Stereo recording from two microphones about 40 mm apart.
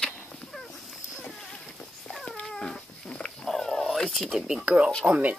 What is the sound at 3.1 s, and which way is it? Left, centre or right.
Dog, left.